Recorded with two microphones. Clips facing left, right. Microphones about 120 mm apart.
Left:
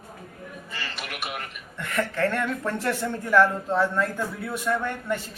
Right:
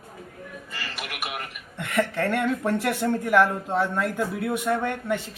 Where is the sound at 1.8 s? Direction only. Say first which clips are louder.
Right 1 dB; 15° right (ahead or behind).